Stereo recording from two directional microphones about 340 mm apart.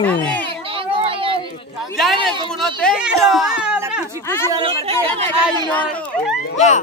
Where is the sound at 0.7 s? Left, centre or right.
Centre.